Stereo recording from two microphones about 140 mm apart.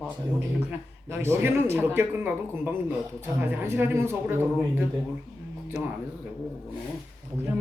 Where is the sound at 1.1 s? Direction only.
20° right (ahead or behind).